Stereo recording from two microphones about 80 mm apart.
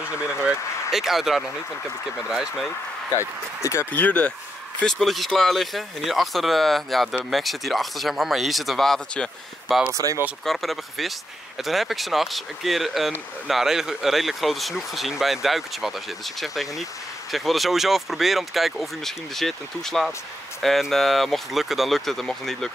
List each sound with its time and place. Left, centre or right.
0.9 s speech: centre
3.9 s speech: centre
4.8 s speech: centre
10.0 s speech: right
10.4 s speech: centre